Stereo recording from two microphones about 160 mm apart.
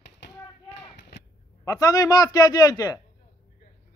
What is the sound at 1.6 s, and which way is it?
A man's voice, 25° left (ahead or behind).